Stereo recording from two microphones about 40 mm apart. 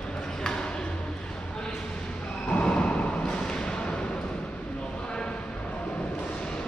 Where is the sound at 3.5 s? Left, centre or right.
Left.